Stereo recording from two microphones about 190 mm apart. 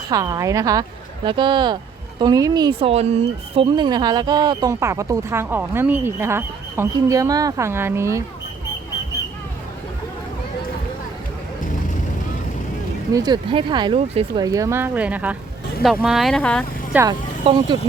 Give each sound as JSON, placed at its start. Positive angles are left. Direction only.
{"t": 0.1, "sound": "speech", "side_deg": -20}
{"t": 13.1, "sound": "speech", "side_deg": -20}
{"t": 14.4, "sound": "speech", "side_deg": -15}
{"t": 17.1, "sound": "speech", "side_deg": -25}